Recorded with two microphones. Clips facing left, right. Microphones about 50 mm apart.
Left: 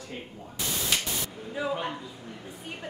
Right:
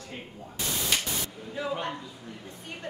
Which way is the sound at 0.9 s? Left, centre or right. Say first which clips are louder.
Even; centre.